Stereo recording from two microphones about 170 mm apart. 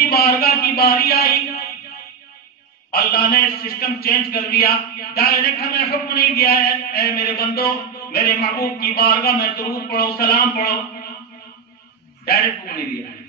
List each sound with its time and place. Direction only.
0.1 s a man's voice: 60° left (ahead or behind)
2.9 s a man's voice: 60° left (ahead or behind)
12.3 s a man's voice: 60° left (ahead or behind)